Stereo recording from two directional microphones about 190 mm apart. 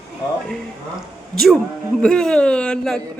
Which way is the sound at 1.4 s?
Centre (ahead or behind).